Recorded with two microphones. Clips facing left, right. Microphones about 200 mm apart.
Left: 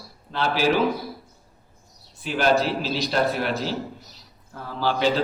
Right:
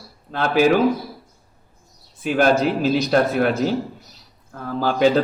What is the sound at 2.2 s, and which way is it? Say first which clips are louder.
A man's voice: right 4 dB; 50° right (ahead or behind).